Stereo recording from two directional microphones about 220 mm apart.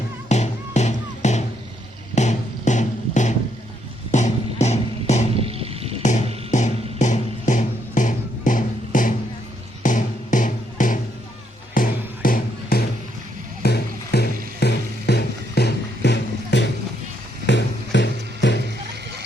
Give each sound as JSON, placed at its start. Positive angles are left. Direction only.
{"t": 0.3, "sound": "music", "side_deg": 30}
{"t": 2.1, "sound": "a sound", "side_deg": 35}
{"t": 5.4, "sound": "vehicle", "side_deg": -25}
{"t": 6.0, "sound": "music", "side_deg": 35}